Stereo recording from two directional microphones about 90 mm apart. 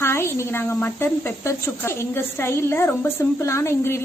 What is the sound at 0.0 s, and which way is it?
A woman's voice, 30° left (ahead or behind).